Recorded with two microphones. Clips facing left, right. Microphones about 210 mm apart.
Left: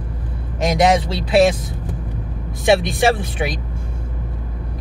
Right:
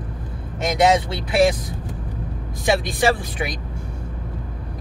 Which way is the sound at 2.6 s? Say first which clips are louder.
Left 4 dB; 25° left (ahead or behind).